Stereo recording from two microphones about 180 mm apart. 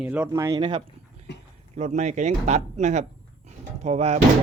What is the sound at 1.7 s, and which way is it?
Speech, 40° right (ahead or behind).